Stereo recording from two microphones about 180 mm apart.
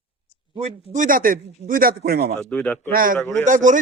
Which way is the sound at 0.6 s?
35° right (ahead or behind).